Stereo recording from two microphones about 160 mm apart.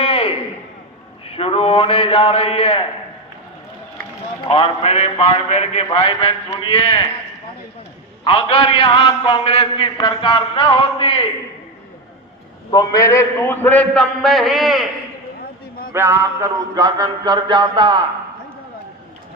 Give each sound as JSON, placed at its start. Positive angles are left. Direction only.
{"t": 0.0, "sound": "a sound", "side_deg": 40}
{"t": 1.2, "sound": "a man's voice", "side_deg": 35}
{"t": 4.4, "sound": "a man's voice", "side_deg": 35}
{"t": 8.2, "sound": "a man's voice", "side_deg": 35}
{"t": 12.7, "sound": "a man's voice", "side_deg": 20}
{"t": 15.9, "sound": "mantra", "side_deg": -15}